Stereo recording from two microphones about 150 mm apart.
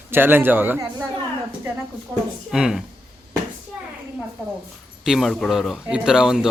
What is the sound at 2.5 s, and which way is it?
Speech, 5° right (ahead or behind).